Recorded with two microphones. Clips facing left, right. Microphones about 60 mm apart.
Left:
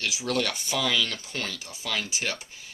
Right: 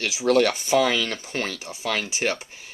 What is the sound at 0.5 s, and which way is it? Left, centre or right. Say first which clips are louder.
Speech: right 7 dB; right.